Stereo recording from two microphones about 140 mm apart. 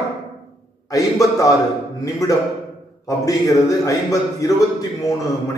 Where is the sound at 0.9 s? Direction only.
25° left (ahead or behind).